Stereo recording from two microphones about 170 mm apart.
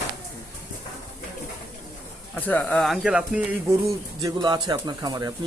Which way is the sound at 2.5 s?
10° left (ahead or behind).